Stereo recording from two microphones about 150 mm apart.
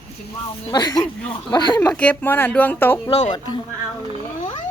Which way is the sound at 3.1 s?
45° left (ahead or behind).